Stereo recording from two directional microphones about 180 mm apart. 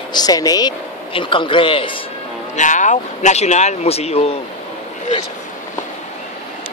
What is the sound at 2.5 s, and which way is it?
A man's voice, 45° left (ahead or behind).